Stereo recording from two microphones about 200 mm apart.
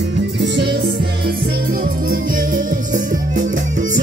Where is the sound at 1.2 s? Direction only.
45° right (ahead or behind).